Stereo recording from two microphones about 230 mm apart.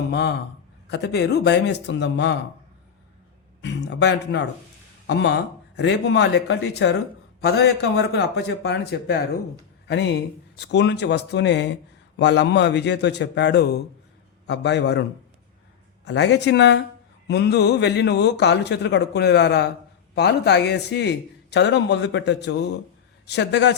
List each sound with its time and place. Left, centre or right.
0.1 s speech: left
3.6 s speech: left
16.0 s speech: left